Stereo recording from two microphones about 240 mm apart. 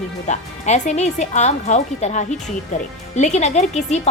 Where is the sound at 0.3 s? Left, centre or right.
Left.